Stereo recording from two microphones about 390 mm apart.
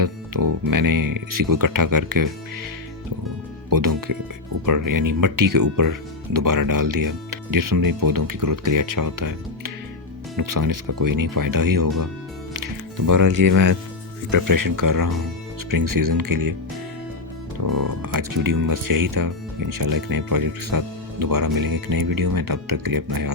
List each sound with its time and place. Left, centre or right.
0.0 s speech: right
3.7 s speech: right
17.7 s speech: right